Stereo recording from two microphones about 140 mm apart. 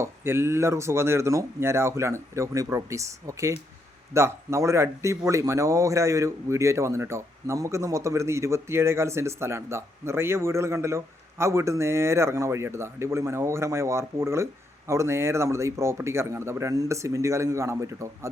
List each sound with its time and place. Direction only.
0.0 s speech: 15° right (ahead or behind)